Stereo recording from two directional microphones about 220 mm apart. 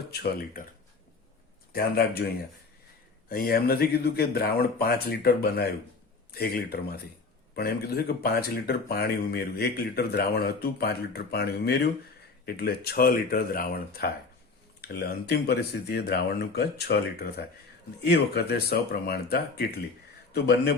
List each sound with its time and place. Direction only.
0.1 s speech: 45° left (ahead or behind)
3.2 s speech: 45° left (ahead or behind)